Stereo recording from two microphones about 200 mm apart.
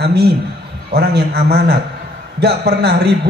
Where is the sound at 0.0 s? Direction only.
55° right (ahead or behind).